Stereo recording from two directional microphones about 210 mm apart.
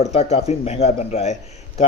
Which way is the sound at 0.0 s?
30° left (ahead or behind).